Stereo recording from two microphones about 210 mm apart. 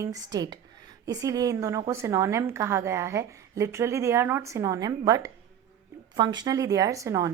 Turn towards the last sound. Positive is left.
turn(degrees=-15)  # may be behind; listen again after turning